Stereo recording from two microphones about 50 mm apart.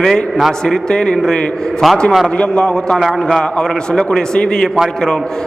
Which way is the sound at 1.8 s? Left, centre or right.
Centre.